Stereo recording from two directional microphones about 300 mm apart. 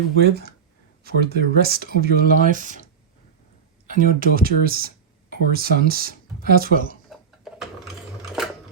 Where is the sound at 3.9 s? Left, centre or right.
Right.